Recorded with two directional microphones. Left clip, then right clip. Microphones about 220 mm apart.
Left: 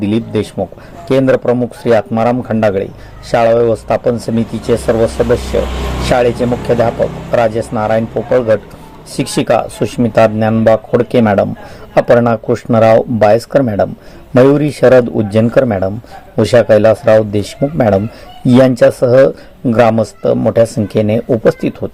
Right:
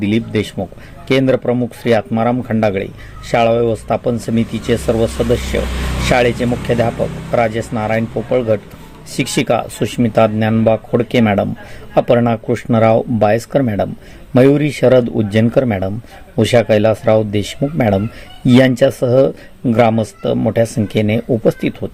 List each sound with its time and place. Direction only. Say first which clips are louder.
0.0 s a man's voice: left 2 dB; centre (ahead or behind)
5.6 s a sound: left 3 dB; 50° right (ahead or behind)
6.1 s a man's voice: left 2 dB; 5° right (ahead or behind)